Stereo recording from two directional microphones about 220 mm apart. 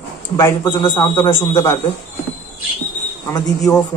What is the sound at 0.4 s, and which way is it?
A man's voice, 20° left (ahead or behind).